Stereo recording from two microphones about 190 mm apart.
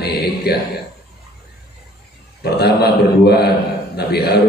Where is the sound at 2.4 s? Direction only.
55° left (ahead or behind).